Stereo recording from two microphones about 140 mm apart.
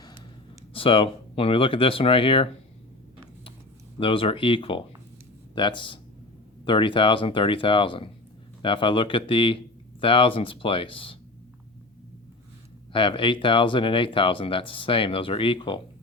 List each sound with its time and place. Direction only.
0.7 s speech: 40° left (ahead or behind)
4.0 s speech: 40° left (ahead or behind)
12.9 s speech: 40° left (ahead or behind)